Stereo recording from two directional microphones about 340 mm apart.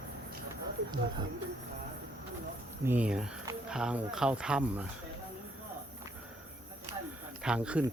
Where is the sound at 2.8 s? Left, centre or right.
Centre.